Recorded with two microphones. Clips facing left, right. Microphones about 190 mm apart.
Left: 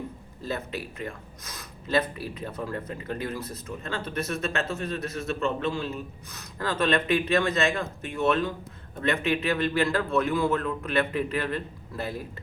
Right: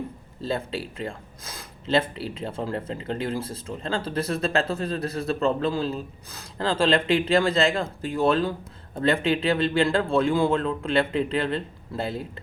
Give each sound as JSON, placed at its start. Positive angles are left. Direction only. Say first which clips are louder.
{"t": 0.4, "sound": "speech", "louder": "right 4 dB", "side_deg": -30}